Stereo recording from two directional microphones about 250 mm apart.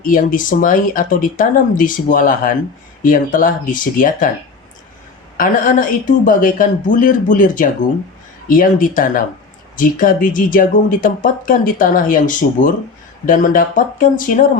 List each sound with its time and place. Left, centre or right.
0.0 s speech: left
5.4 s speech: left